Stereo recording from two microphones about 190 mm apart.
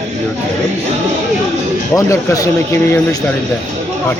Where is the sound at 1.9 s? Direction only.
15° left (ahead or behind).